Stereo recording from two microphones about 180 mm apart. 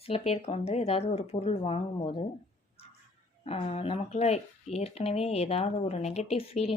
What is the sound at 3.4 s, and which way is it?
Speech, 35° left (ahead or behind).